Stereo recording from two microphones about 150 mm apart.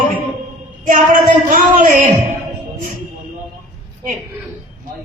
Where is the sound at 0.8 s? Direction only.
60° right (ahead or behind).